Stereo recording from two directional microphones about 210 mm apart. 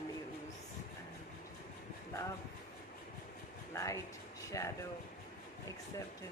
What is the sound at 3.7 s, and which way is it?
Speech, 15° left (ahead or behind).